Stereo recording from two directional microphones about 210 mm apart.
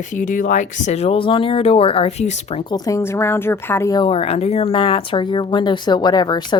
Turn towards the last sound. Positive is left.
turn(degrees=20)  # may be behind; listen again after turning